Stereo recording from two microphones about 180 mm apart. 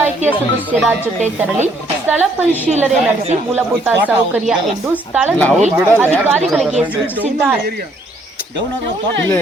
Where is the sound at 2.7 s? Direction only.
40° right (ahead or behind).